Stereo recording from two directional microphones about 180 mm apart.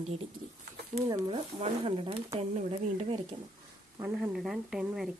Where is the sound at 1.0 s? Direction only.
25° right (ahead or behind).